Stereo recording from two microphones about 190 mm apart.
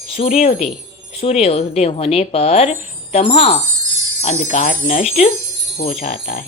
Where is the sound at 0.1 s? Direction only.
35° left (ahead or behind).